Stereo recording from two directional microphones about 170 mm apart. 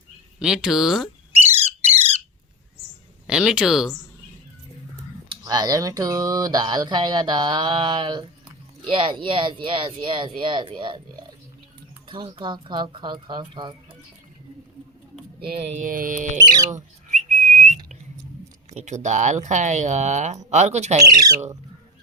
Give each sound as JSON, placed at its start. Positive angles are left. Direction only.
{"t": 0.3, "sound": "speech", "side_deg": -5}
{"t": 1.8, "sound": "squawk", "side_deg": -35}
{"t": 3.2, "sound": "speech", "side_deg": -5}
{"t": 5.3, "sound": "speech", "side_deg": -20}
{"t": 15.4, "sound": "speech", "side_deg": -40}
{"t": 16.7, "sound": "whistling", "side_deg": -45}
{"t": 18.7, "sound": "speech", "side_deg": -40}
{"t": 21.0, "sound": "speech", "side_deg": -20}